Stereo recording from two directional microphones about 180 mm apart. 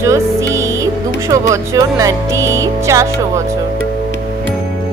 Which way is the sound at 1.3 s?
20° right (ahead or behind).